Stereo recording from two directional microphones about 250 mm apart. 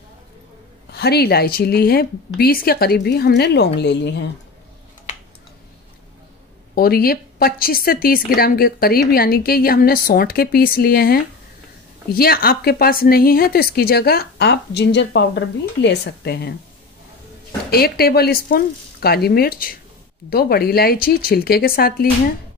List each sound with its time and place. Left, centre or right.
0.9 s speech: left
6.7 s speech: left
17.6 s speech: left